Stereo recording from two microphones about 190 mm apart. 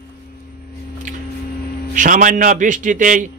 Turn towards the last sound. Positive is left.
turn(degrees=-45)  # may be behind; listen again after turning